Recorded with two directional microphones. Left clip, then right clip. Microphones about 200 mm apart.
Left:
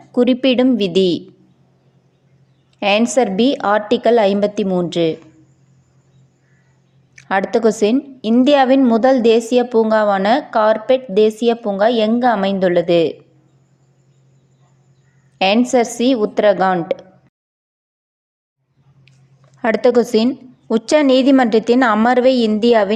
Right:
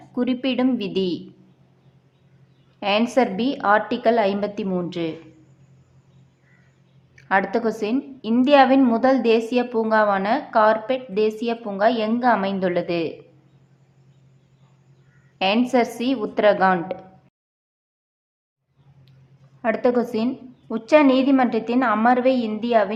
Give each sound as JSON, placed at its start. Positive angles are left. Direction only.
{"t": 0.1, "sound": "a woman's voice", "side_deg": 30}
{"t": 2.8, "sound": "a woman's voice", "side_deg": 35}
{"t": 7.2, "sound": "a woman's voice", "side_deg": 35}
{"t": 15.4, "sound": "a woman's voice", "side_deg": 30}
{"t": 19.6, "sound": "a woman's voice", "side_deg": 35}